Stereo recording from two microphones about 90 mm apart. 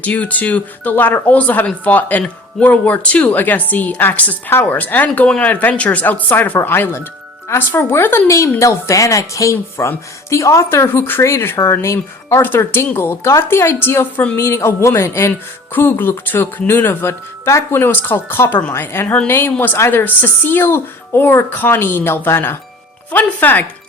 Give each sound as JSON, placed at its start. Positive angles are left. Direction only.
{"t": 0.0, "sound": "a woman's voice", "side_deg": 15}